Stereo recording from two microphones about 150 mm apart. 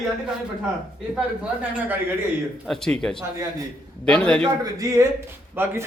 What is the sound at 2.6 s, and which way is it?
A man's voice, centre (ahead or behind).